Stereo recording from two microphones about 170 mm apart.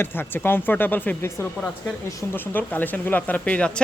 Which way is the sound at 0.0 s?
10° left (ahead or behind).